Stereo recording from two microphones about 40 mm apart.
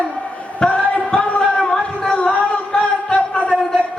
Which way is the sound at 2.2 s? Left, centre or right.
Left.